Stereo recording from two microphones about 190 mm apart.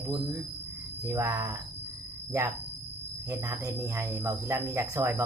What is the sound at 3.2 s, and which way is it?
Speech, 15° right (ahead or behind).